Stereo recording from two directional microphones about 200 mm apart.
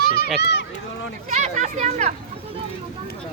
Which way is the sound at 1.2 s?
35° right (ahead or behind).